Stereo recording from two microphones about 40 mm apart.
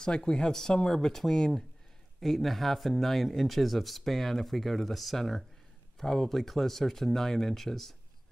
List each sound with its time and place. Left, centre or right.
0.0 s speech: centre